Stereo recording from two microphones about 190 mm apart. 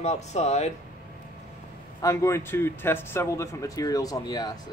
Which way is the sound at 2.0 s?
15° left (ahead or behind).